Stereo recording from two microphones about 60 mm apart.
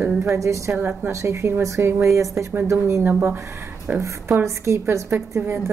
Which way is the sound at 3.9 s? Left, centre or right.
Right.